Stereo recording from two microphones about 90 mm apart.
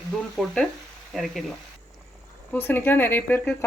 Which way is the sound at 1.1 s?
Centre (ahead or behind).